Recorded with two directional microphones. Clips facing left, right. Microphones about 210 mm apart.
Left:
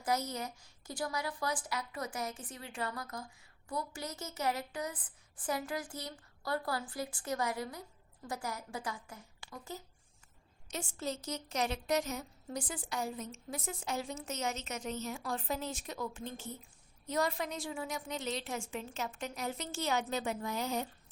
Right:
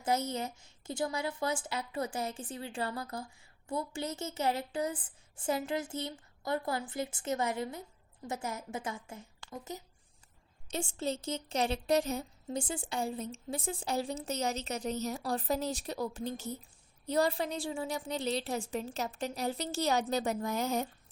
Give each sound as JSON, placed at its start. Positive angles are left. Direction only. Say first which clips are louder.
{"t": 0.0, "sound": "a woman's voice", "louder": "right 3 dB", "side_deg": -25}